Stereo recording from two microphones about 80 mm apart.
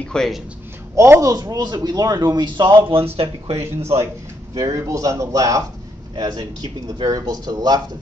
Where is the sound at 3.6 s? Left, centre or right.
Right.